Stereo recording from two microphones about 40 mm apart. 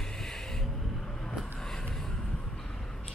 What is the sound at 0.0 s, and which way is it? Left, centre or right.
Vehicle, centre.